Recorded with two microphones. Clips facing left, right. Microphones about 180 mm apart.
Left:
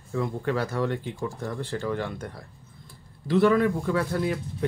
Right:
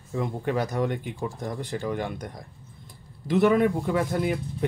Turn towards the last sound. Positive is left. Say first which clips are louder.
# right 1 dB
turn(degrees=-20)  # may be behind; listen again after turning